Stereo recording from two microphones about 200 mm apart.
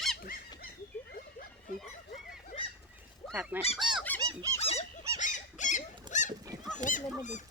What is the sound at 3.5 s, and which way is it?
Goose, 10° right (ahead or behind).